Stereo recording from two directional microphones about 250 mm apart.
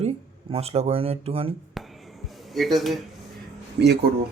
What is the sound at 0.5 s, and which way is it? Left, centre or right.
Speech, right.